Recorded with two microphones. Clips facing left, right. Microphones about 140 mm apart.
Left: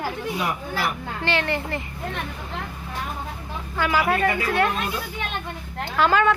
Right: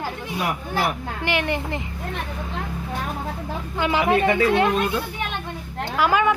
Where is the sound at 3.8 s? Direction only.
20° right (ahead or behind).